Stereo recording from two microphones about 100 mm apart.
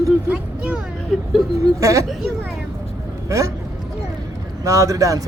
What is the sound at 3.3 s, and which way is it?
Speech, 30° right (ahead or behind).